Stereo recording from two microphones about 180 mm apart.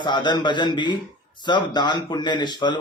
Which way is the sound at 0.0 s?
25° left (ahead or behind).